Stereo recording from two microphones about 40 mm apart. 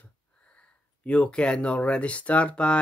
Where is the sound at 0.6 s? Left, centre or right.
Left.